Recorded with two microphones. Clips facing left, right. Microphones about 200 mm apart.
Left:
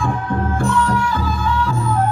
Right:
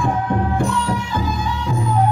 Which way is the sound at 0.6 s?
15° right (ahead or behind).